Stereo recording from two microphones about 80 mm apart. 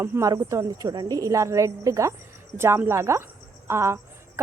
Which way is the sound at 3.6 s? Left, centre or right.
Right.